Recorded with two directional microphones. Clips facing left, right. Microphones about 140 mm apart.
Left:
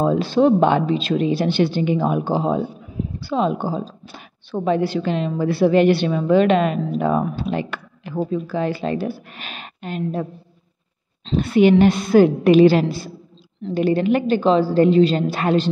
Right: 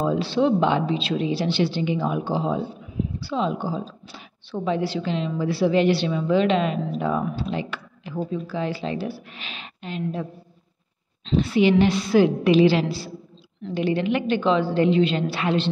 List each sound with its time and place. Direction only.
0.0 s a woman's voice: 50° left (ahead or behind)
11.3 s a woman's voice: 50° left (ahead or behind)